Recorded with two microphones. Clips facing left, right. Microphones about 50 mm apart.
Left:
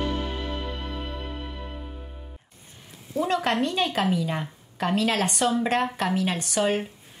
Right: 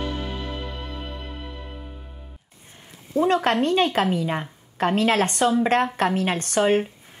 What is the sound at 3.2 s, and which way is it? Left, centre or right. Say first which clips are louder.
A woman's voice: right 4 dB; right.